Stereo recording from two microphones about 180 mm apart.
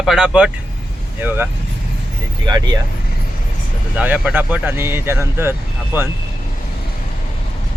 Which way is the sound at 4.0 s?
10° right (ahead or behind).